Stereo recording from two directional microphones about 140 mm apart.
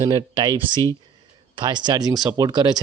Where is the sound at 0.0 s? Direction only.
30° right (ahead or behind).